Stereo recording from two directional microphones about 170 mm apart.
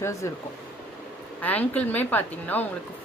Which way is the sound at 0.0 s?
15° left (ahead or behind).